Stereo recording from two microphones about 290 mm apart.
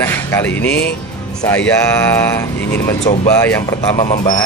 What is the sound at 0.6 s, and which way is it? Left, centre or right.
Speech, left.